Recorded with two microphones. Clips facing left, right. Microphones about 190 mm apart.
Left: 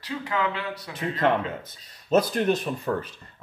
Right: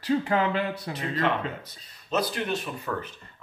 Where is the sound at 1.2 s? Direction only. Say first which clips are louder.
Left 5 dB; 50° left (ahead or behind).